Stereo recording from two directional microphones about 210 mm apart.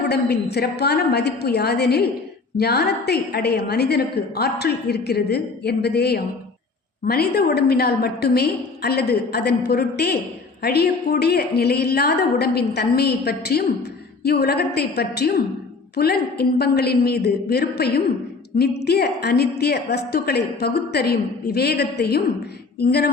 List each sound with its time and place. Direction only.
0.1 s a woman's voice: 50° left (ahead or behind)